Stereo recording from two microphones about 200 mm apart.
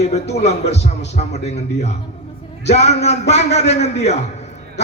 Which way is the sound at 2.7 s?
35° left (ahead or behind).